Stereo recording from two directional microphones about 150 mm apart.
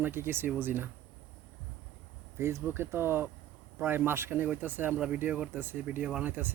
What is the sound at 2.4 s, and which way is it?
Speech, 15° right (ahead or behind).